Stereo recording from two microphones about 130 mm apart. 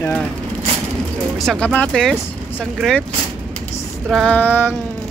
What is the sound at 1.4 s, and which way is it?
Speech, 5° left (ahead or behind).